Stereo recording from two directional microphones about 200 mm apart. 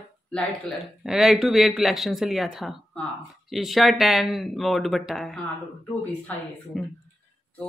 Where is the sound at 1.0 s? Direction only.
Centre (ahead or behind).